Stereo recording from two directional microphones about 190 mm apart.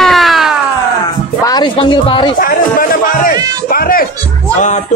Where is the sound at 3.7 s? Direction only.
50° left (ahead or behind).